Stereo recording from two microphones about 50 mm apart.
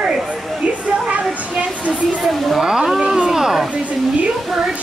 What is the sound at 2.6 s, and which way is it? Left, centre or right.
Speech, centre.